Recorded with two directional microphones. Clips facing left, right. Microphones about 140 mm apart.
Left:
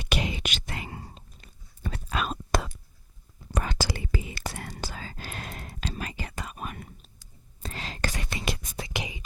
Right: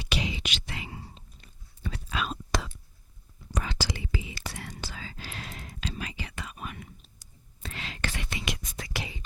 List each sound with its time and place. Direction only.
0.0 s whispering: 50° left (ahead or behind)
8.8 s whispering: 20° left (ahead or behind)